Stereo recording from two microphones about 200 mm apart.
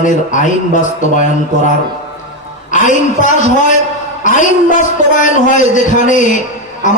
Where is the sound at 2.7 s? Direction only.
40° left (ahead or behind).